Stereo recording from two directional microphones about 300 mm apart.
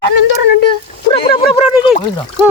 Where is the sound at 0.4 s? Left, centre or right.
Left.